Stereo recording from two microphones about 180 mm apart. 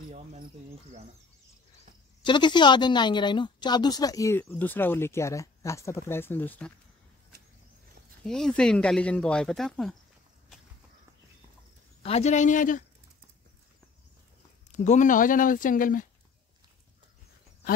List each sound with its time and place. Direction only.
2.2 s speech: 25° left (ahead or behind); by 6.7 s 10° left (ahead or behind)
8.2 s speech: 5° left (ahead or behind)
12.0 s speech: 35° left (ahead or behind)
14.7 s speech: 40° left (ahead or behind)